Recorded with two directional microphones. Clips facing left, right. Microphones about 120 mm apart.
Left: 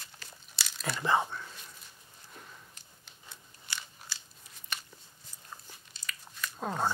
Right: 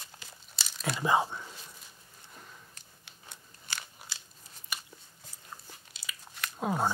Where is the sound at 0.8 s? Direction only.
10° right (ahead or behind).